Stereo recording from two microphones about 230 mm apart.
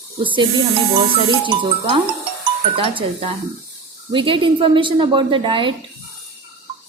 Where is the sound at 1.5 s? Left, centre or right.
Right.